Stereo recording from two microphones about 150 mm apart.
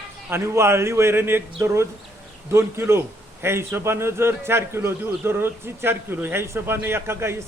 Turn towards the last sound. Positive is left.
turn(degrees=-15)  # may be behind; listen again after turning